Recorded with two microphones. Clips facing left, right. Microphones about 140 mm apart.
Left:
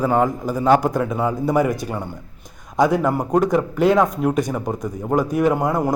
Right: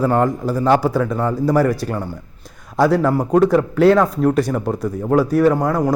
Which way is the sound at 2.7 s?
15° left (ahead or behind).